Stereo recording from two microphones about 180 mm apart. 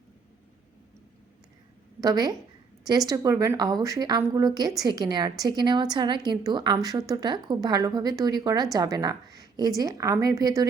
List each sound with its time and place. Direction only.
2.0 s a woman's voice: 20° right (ahead or behind)